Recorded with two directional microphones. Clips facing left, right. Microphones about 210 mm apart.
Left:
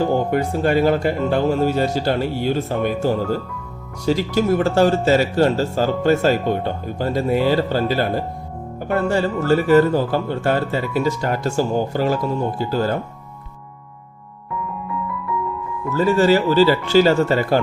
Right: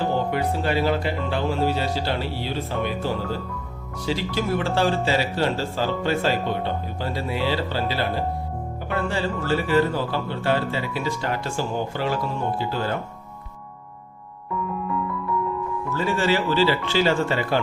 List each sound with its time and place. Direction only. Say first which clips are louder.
0.0 s speech: left 5 dB; 45° left (ahead or behind)
15.9 s speech: left 8 dB; 40° left (ahead or behind)